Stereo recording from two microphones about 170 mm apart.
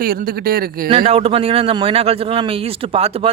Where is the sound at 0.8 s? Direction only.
35° right (ahead or behind).